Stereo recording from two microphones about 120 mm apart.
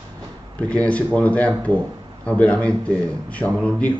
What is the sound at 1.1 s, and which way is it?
A man's voice, 10° left (ahead or behind).